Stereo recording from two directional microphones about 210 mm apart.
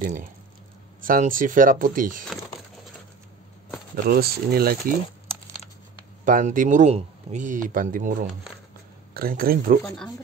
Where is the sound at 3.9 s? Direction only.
45° right (ahead or behind).